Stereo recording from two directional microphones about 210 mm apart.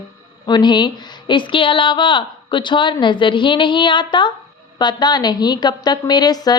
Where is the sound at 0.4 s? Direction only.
20° left (ahead or behind).